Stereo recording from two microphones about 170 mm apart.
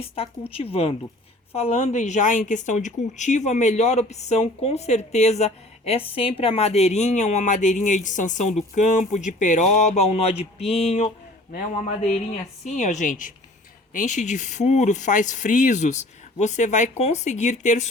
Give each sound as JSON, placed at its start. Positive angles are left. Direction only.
{"t": 0.0, "sound": "a woman's voice", "side_deg": 35}
{"t": 12.6, "sound": "a woman's voice", "side_deg": 45}